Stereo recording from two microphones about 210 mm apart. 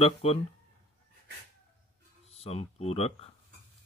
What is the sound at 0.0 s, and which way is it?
Speech, 30° left (ahead or behind).